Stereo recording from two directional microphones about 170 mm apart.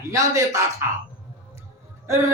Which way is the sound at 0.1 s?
20° right (ahead or behind).